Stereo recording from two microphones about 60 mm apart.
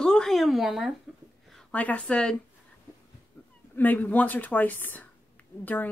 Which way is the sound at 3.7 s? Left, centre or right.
Left.